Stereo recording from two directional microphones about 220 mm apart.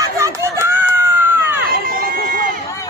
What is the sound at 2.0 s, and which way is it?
Run, 40° right (ahead or behind).